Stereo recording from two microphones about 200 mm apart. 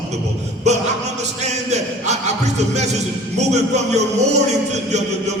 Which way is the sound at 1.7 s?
35° right (ahead or behind).